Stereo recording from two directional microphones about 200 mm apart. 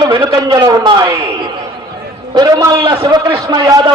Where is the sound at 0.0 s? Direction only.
20° right (ahead or behind).